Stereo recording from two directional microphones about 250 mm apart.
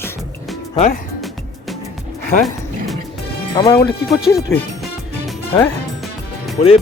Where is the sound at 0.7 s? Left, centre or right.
Left.